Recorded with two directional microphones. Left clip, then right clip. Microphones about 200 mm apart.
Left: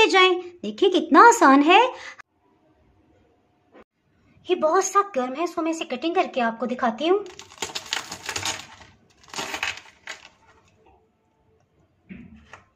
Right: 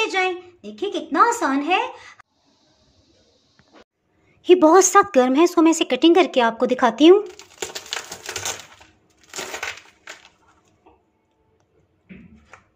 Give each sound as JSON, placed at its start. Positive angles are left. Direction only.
{"t": 0.0, "sound": "a woman's voice", "side_deg": 55}
{"t": 4.4, "sound": "speech", "side_deg": -40}